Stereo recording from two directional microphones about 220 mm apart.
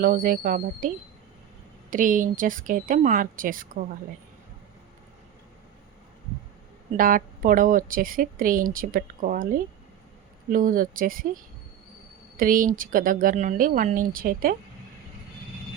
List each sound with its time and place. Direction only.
0.0 s speech: 40° right (ahead or behind)
1.9 s speech: 35° right (ahead or behind)
6.9 s speech: 40° right (ahead or behind)
12.4 s speech: 40° right (ahead or behind)